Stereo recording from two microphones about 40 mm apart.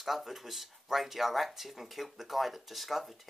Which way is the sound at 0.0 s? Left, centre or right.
Centre.